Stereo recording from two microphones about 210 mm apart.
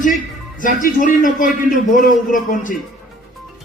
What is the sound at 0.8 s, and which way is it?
A man's voice, 40° left (ahead or behind).